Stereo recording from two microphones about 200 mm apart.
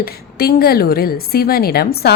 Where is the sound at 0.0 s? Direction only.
50° left (ahead or behind).